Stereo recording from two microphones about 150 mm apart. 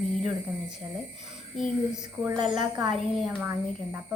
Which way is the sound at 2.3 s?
30° right (ahead or behind).